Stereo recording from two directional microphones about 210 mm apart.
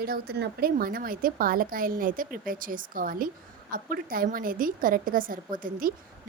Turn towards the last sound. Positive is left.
turn(degrees=-40)  # may be behind; listen again after turning